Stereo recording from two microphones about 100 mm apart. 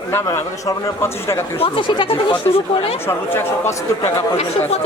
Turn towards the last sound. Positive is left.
turn(degrees=25)  # may be behind; listen again after turning